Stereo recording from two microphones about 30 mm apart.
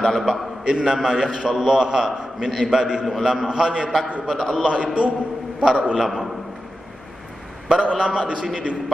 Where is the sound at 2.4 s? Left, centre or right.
Centre.